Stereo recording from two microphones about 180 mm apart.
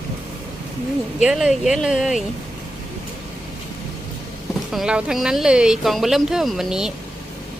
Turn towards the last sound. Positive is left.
turn(degrees=-5)  # may be behind; listen again after turning